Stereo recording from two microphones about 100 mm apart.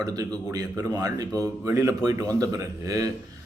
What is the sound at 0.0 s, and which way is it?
Speech, 40° right (ahead or behind).